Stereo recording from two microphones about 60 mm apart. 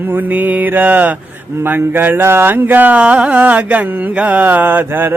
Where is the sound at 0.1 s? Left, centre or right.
Right.